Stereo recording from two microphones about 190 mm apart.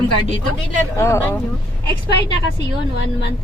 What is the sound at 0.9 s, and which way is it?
Speech, 15° left (ahead or behind).